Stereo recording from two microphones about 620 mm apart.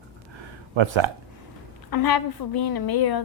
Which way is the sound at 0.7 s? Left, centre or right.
Right.